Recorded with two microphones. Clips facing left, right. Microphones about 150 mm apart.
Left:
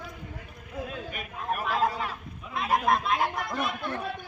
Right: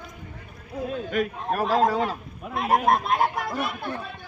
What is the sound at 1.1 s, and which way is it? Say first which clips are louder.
Speech: right 9 dB; 90° right.